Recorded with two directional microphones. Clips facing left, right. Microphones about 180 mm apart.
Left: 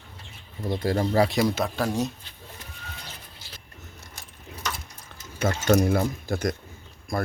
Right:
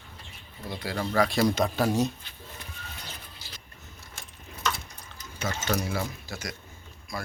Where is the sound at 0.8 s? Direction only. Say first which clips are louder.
Left 4 dB; 45° left (ahead or behind).